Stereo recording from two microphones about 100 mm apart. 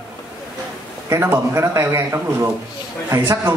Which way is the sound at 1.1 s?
25° right (ahead or behind).